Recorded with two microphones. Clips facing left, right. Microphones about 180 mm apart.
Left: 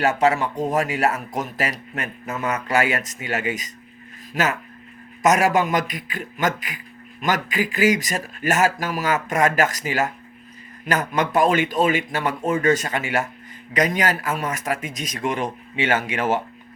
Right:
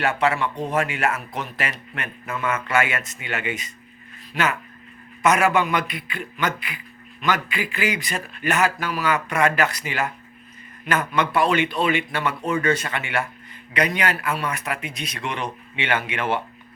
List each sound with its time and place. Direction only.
0.0 s a man's voice: 40° left (ahead or behind)